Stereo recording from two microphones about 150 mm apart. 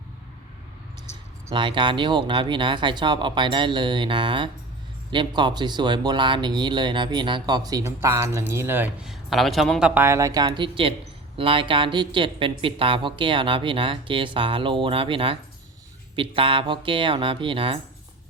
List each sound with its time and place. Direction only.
1.5 s speech: 30° right (ahead or behind); by 8.9 s 15° right (ahead or behind)
9.0 s speech: centre (ahead or behind); by 17.7 s 35° right (ahead or behind)